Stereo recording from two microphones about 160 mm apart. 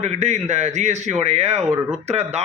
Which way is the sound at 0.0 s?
45° right (ahead or behind).